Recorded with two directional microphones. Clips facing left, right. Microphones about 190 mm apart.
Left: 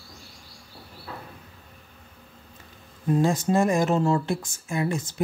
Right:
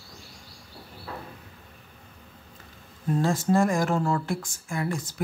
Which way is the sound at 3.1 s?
20° left (ahead or behind).